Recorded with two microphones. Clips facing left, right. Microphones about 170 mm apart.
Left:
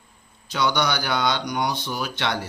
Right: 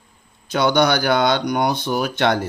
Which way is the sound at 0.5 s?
50° right (ahead or behind).